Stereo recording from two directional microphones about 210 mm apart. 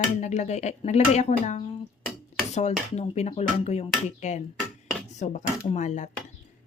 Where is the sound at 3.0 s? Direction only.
30° left (ahead or behind).